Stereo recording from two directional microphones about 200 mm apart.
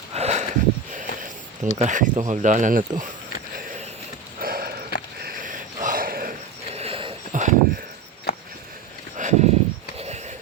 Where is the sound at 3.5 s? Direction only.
40° right (ahead or behind).